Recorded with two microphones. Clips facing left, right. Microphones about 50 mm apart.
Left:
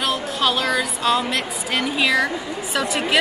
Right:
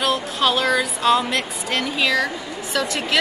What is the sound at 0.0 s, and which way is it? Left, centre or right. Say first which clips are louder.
Speech: right 1 dB; centre.